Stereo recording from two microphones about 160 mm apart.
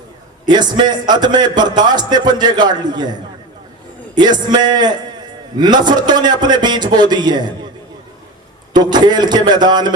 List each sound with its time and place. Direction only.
0.4 s a man's voice: 25° right (ahead or behind)
8.7 s a man's voice: 25° right (ahead or behind)